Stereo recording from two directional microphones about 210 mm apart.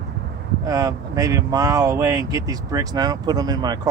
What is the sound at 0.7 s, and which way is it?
Speech, 15° right (ahead or behind).